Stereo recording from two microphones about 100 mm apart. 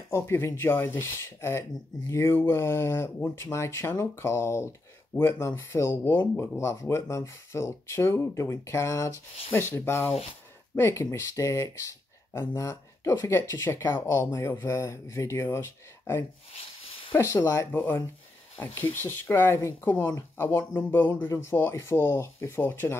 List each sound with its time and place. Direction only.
0.1 s speech: 25° left (ahead or behind)